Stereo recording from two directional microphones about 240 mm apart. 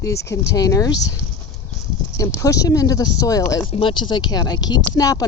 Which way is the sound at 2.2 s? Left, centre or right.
Centre.